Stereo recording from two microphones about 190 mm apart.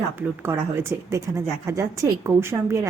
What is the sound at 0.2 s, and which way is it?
A woman's voice, 10° right (ahead or behind).